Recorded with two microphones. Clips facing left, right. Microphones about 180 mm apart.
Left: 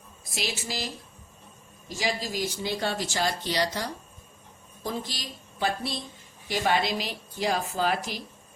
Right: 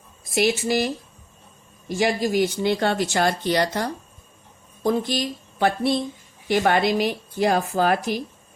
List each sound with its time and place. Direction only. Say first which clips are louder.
0.3 s speech: right 13 dB; 60° right (ahead or behind)